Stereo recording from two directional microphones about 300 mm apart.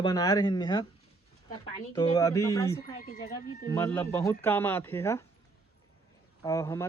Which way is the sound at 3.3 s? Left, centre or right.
Centre.